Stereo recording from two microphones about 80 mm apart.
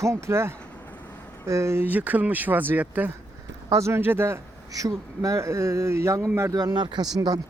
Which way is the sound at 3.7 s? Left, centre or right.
Right.